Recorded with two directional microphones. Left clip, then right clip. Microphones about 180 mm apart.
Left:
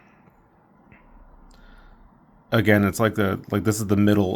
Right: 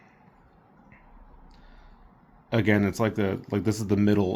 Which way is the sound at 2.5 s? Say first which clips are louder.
Left 5 dB; 40° left (ahead or behind).